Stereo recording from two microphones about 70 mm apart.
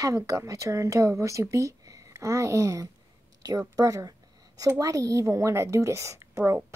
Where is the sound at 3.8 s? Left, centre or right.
Right.